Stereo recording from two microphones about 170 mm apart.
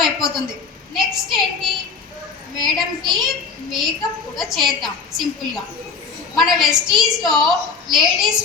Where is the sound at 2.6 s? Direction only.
25° right (ahead or behind).